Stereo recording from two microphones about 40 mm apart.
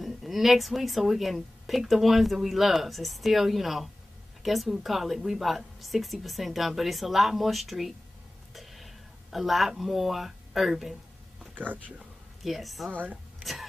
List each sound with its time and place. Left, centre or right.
0.0 s a woman's voice: centre
8.5 s a sound: centre
11.5 s speech: right
12.4 s a woman's voice: centre
12.9 s speech: right
13.4 s whispering: centre